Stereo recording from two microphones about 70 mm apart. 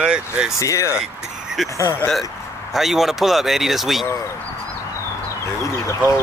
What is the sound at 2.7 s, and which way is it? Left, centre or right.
Speech, centre.